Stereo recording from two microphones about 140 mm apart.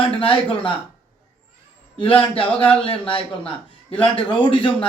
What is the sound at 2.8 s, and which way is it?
A man's voice, 40° left (ahead or behind).